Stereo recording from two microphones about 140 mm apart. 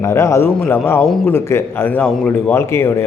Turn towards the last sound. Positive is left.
turn(degrees=20)  # may be behind; listen again after turning